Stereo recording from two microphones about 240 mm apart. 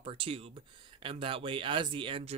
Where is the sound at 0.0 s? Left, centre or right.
Right.